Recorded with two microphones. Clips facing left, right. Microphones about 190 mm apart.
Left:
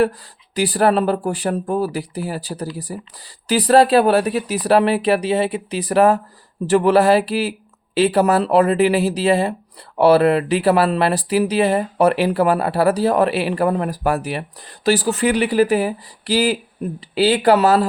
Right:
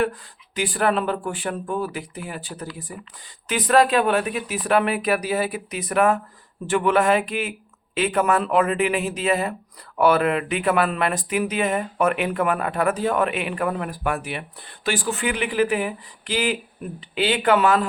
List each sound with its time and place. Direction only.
0.5 s speech: 35° left (ahead or behind)